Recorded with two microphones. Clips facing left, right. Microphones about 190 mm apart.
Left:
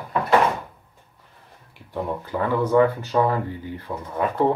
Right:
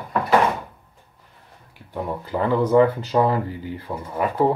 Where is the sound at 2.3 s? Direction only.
20° right (ahead or behind).